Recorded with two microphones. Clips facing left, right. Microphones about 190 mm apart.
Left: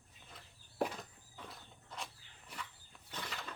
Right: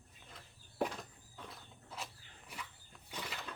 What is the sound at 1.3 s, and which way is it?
Walk, centre (ahead or behind).